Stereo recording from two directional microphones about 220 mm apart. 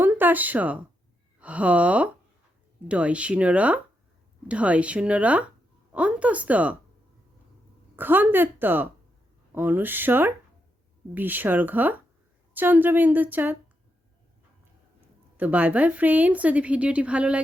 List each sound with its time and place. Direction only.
0.0 s a woman's voice: 10° right (ahead or behind)
7.9 s a woman's voice: 10° right (ahead or behind)
15.4 s a woman's voice: 5° right (ahead or behind)